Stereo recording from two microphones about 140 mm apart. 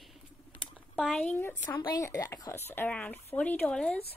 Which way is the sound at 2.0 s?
20° left (ahead or behind).